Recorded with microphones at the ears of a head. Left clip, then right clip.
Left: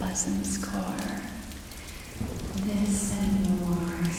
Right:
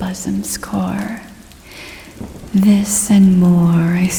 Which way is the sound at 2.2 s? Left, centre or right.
Right.